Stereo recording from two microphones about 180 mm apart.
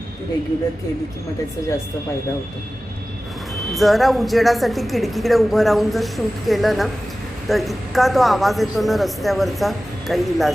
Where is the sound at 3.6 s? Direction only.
Centre (ahead or behind).